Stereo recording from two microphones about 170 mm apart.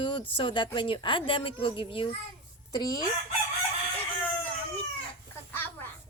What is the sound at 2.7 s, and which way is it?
Chicken, 20° left (ahead or behind).